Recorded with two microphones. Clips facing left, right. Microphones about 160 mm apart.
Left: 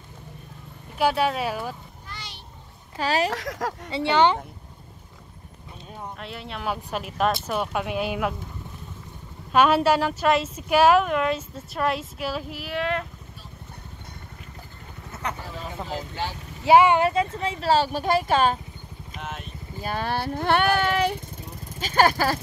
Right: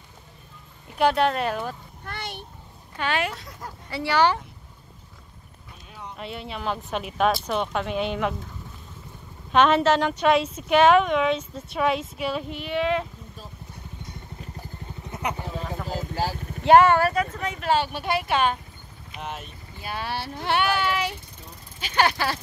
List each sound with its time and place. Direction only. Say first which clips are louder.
0.9 s speech: right 1 dB; 5° left (ahead or behind)
2.0 s a sound: right 8 dB; 55° right (ahead or behind)
3.0 s speech: left 3 dB; 35° left (ahead or behind)
3.3 s speech: left 10 dB; 90° left
3.9 s speech: left 1 dB; 20° left (ahead or behind)
6.1 s a woman's voice: right 2 dB; centre (ahead or behind)
9.5 s a woman's voice: even; 5° left (ahead or behind)
15.0 s vehicle: right 2 dB; 15° right (ahead or behind)
15.9 s vehicle: right 4 dB; 40° right (ahead or behind)
16.6 s speech: right 1 dB; 10° left (ahead or behind); by 18.6 s 40° left (ahead or behind)
19.1 s speech: right 1 dB; centre (ahead or behind)
19.8 s speech: left 4 dB; 45° left (ahead or behind)